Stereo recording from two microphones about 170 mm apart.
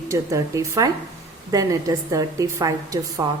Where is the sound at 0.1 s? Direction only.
20° right (ahead or behind).